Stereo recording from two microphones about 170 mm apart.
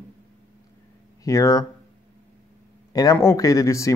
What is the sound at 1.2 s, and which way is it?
Speech, 20° left (ahead or behind).